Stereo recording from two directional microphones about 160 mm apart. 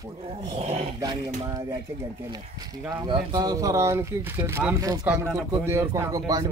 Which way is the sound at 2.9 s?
25° right (ahead or behind).